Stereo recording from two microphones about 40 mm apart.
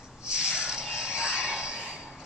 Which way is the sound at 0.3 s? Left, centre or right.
Right.